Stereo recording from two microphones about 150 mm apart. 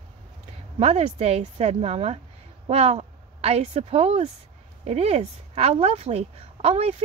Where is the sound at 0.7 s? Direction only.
45° right (ahead or behind).